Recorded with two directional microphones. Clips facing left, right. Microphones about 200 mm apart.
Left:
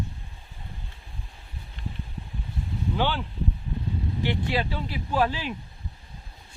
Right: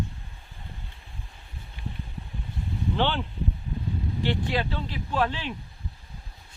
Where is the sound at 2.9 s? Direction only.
5° left (ahead or behind).